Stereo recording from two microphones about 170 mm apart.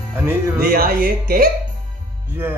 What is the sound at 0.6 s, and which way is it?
Speech, 60° right (ahead or behind).